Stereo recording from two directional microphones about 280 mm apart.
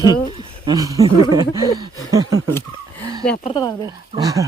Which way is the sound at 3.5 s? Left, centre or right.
Centre.